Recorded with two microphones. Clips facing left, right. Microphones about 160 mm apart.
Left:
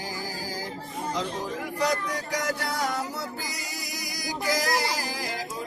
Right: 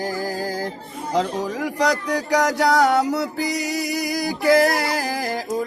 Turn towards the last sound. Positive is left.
turn(degrees=-55)  # may be behind; listen again after turning